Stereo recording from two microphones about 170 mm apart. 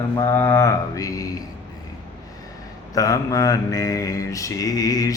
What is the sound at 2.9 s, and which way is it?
Mantra, 20° left (ahead or behind).